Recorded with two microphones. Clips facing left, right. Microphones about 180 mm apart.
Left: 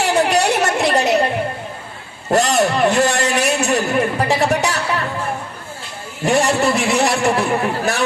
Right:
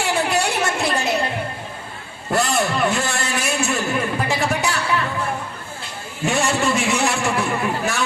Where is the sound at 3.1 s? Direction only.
65° left (ahead or behind).